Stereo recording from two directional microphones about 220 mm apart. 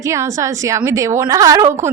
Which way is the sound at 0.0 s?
15° right (ahead or behind).